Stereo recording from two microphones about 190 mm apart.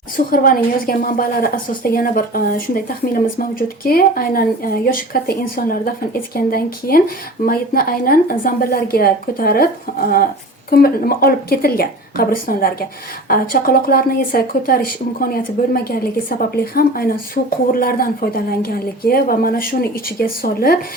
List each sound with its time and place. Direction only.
0.3 s a woman's voice: 50° left (ahead or behind)
3.8 s a woman's voice: 50° left (ahead or behind)